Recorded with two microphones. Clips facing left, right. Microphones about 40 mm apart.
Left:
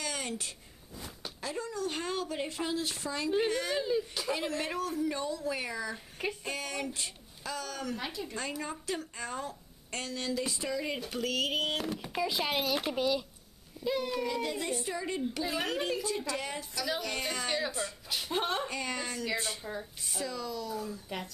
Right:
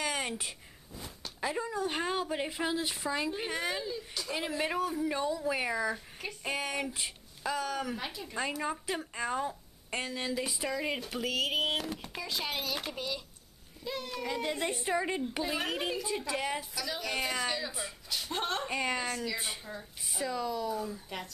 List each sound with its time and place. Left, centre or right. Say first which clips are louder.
0.0 s a sound: right 3 dB; centre
1.4 s a woman's voice: right 3 dB; centre
8.0 s speech: left 2 dB; centre
8.6 s a woman's voice: right 2 dB; centre
14.2 s a woman's voice: even; centre
15.4 s a woman's voice: left 1 dB; centre
18.1 s speech: left 2 dB; centre
18.7 s a woman's voice: right 3 dB; centre